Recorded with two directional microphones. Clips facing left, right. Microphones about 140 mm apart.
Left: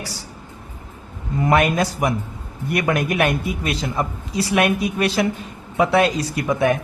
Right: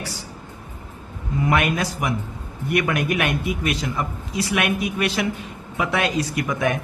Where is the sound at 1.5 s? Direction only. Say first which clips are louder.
Left 4 dB; 35° left (ahead or behind).